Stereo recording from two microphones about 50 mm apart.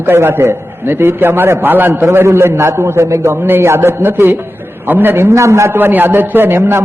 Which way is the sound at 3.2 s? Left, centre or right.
Right.